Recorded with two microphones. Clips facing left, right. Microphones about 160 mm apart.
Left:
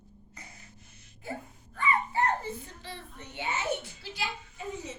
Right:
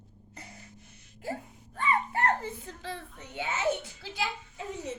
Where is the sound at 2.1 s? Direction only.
80° right.